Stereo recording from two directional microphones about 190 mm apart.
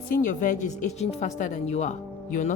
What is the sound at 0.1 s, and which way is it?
A woman's voice, 40° left (ahead or behind).